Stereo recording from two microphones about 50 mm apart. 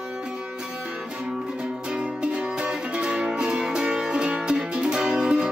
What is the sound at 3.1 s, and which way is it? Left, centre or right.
Music, centre.